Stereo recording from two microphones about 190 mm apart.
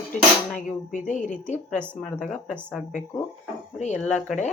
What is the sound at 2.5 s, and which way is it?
Speech, 10° right (ahead or behind).